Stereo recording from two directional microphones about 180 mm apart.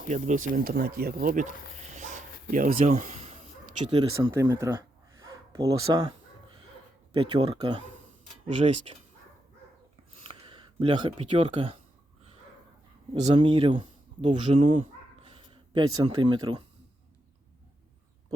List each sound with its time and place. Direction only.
0.1 s speech: 45° right (ahead or behind)
3.8 s speech: 25° right (ahead or behind)
4.3 s speech: 15° right (ahead or behind)
8.4 s speech: 40° right (ahead or behind)
10.2 s a sound: 25° right (ahead or behind)
11.3 s speech: 35° right (ahead or behind)
13.2 s speech: 30° right (ahead or behind)